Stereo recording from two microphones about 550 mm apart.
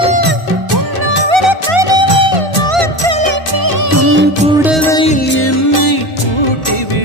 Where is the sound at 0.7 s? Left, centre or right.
Right.